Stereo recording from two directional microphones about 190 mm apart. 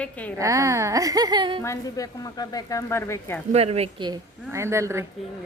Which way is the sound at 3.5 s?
35° right (ahead or behind).